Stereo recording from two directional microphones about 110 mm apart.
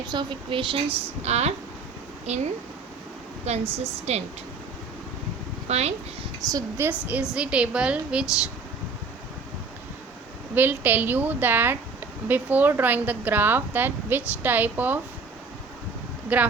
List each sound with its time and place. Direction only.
0.1 s speech: 45° right (ahead or behind)
1.2 s a woman's voice: 80° right
5.6 s a woman's voice: 80° right
6.5 s a woman's voice: 30° right (ahead or behind)
7.1 s speech: 10° right (ahead or behind)
10.5 s speech: 15° right (ahead or behind)
16.3 s speech: 10° right (ahead or behind)